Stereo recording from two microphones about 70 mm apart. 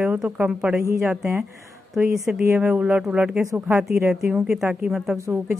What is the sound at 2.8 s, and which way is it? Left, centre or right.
Speech, centre.